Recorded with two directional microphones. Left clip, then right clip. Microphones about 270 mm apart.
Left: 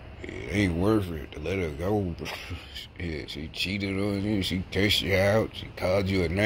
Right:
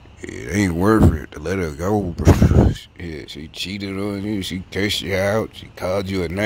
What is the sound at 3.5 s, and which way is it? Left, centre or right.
Speech, right.